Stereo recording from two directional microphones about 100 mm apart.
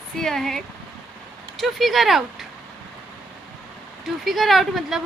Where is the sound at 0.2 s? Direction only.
5° left (ahead or behind).